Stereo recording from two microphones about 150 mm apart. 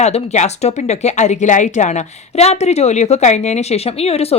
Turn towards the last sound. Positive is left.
turn(degrees=40)  # may be behind; listen again after turning